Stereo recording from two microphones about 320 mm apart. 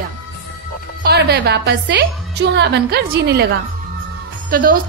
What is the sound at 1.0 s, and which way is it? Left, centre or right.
A woman's voice, right.